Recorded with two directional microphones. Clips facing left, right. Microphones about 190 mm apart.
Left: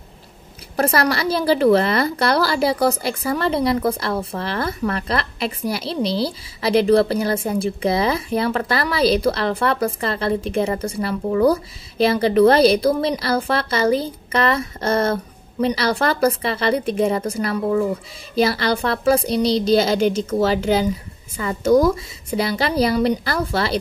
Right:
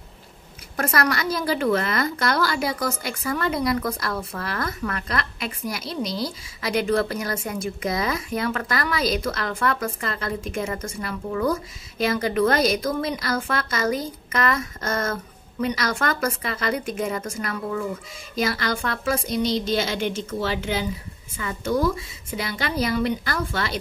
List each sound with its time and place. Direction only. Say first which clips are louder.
0.7 s a woman's voice: left 5 dB; 30° left (ahead or behind)